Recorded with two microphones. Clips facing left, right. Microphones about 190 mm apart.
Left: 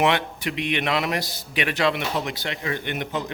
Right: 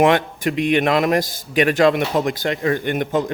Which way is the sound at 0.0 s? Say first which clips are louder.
Right 6 dB; 45° right (ahead or behind).